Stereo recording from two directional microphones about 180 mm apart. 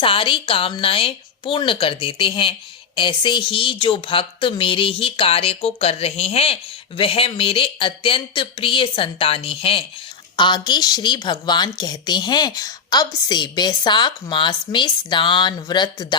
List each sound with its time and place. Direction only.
0.0 s a woman's voice: 30° left (ahead or behind)